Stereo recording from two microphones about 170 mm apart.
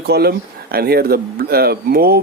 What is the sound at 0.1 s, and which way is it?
Speech, 65° right (ahead or behind).